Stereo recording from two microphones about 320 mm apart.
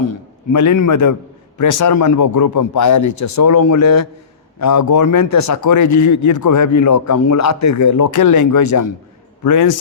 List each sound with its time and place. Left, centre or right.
0.1 s a man's voice: left